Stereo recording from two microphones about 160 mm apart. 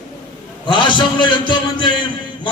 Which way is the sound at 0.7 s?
30° left (ahead or behind).